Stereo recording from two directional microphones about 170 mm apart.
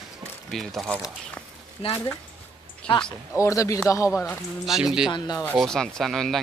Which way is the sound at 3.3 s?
20° left (ahead or behind).